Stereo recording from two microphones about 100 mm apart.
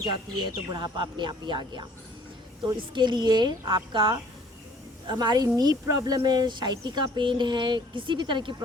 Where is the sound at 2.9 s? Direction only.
50° right (ahead or behind).